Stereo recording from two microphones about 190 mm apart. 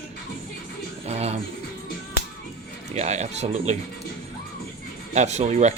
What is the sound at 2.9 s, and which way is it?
Speech, 35° right (ahead or behind).